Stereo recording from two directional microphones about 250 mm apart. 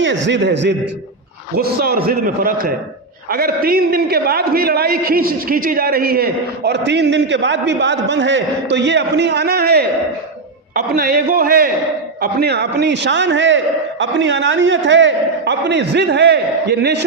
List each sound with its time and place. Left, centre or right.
0.0 s a man's voice: right